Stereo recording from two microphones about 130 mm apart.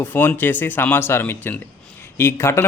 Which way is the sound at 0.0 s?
15° left (ahead or behind).